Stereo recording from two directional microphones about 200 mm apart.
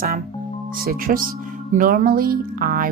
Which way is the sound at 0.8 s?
45° right (ahead or behind).